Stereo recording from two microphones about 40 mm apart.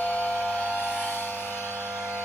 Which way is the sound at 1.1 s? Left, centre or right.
Left.